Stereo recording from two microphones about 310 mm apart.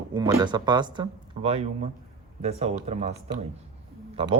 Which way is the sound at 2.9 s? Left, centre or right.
Right.